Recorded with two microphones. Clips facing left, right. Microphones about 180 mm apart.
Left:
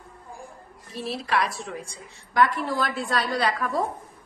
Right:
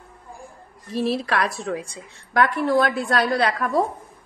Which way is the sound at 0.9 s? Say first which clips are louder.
Right 4 dB; 85° right.